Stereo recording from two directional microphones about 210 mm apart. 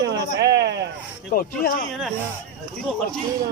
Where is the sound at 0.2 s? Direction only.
55° right (ahead or behind).